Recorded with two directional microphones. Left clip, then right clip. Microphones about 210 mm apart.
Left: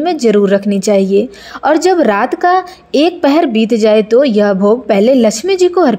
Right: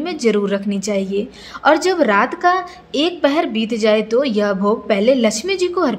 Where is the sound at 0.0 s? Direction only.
25° left (ahead or behind).